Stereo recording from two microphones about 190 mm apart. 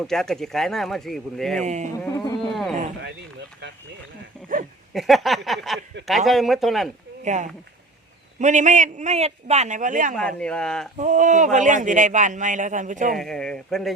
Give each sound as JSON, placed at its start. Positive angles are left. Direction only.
{"t": 0.0, "sound": "speech", "side_deg": 0}
{"t": 1.6, "sound": "speech", "side_deg": -40}
{"t": 2.0, "sound": "speech", "side_deg": 15}
{"t": 2.5, "sound": "a sound", "side_deg": 0}
{"t": 4.9, "sound": "speech", "side_deg": 0}
{"t": 7.3, "sound": "speech", "side_deg": -40}
{"t": 10.2, "sound": "speech", "side_deg": 5}
{"t": 10.9, "sound": "speech", "side_deg": -40}
{"t": 13.1, "sound": "speech", "side_deg": 5}